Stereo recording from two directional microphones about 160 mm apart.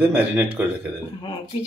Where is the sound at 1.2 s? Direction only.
30° left (ahead or behind).